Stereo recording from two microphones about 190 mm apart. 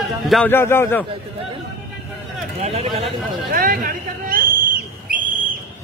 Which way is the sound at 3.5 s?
50° right (ahead or behind).